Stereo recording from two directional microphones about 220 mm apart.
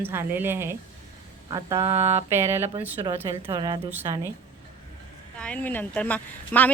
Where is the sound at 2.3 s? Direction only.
10° right (ahead or behind).